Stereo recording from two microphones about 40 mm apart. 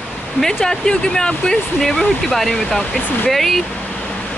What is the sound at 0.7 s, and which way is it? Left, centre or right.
Speech, centre.